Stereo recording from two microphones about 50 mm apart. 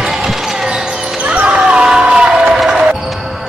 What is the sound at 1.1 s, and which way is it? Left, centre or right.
Basketball bounce, right.